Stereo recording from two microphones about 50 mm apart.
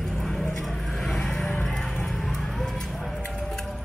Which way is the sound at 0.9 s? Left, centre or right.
Centre.